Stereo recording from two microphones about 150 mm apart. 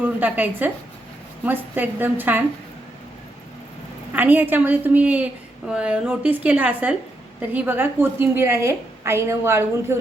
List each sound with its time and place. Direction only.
0.0 s a woman's voice: 10° right (ahead or behind)
4.1 s a woman's voice: 10° right (ahead or behind)